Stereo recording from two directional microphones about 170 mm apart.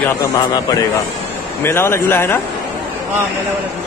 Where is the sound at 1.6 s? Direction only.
15° left (ahead or behind).